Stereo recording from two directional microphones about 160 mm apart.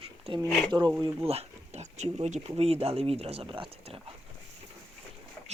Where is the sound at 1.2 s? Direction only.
40° right (ahead or behind).